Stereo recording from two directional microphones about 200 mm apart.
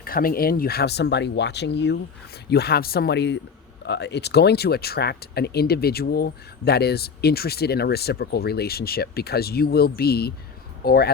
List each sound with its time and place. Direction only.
0.0 s speech: 45° left (ahead or behind)